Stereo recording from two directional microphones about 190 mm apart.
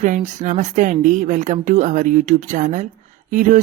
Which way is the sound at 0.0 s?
40° right (ahead or behind).